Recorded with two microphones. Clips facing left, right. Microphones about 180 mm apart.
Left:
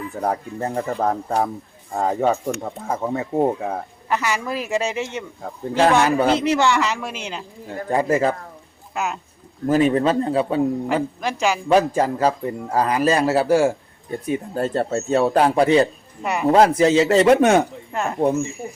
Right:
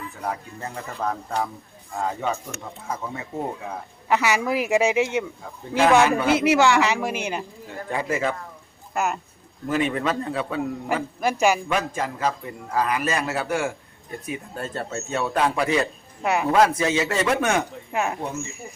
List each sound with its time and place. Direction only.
0.2 s a man's voice: 40° left (ahead or behind)
4.1 s a woman's voice: 10° right (ahead or behind)
5.8 s a man's voice: 40° left (ahead or behind)
6.3 s a woman's voice: 5° right (ahead or behind)
7.9 s a man's voice: 40° left (ahead or behind)
9.6 s a man's voice: 40° left (ahead or behind)
11.2 s a woman's voice: 10° right (ahead or behind)
11.7 s a man's voice: 35° left (ahead or behind)
16.2 s speech: 5° right (ahead or behind)
16.5 s a man's voice: 35° left (ahead or behind)
17.9 s a woman's voice: 5° right (ahead or behind)